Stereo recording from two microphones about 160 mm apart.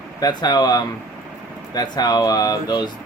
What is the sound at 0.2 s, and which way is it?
Speech, 25° left (ahead or behind).